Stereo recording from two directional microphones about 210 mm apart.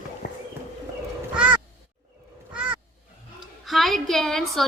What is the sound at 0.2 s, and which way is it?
Clip-clop, 45° left (ahead or behind).